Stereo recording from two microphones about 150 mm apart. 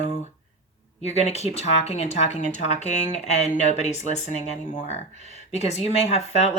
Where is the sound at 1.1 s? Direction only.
45° left (ahead or behind).